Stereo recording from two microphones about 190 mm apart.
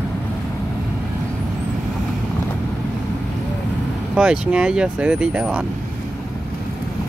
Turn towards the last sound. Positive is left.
turn(degrees=-5)  # may be behind; listen again after turning